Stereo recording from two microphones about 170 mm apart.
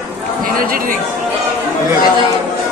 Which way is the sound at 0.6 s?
55° right (ahead or behind).